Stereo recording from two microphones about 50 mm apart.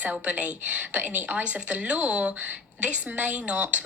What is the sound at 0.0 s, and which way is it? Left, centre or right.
A woman's voice, right.